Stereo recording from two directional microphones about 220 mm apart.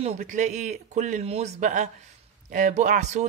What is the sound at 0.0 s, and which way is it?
Speech, 30° right (ahead or behind).